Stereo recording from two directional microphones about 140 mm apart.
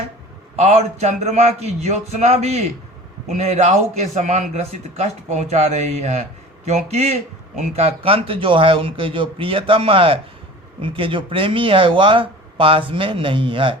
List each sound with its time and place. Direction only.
0.5 s a man's voice: 50° right (ahead or behind)